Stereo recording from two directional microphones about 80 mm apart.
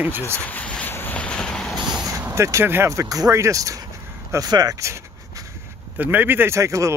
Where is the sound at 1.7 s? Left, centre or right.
Centre.